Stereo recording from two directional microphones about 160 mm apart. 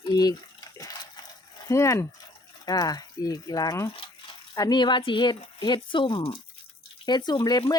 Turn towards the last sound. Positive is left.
turn(degrees=25)  # may be behind; listen again after turning